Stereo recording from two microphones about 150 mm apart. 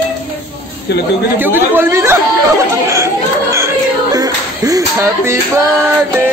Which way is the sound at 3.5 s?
20° right (ahead or behind).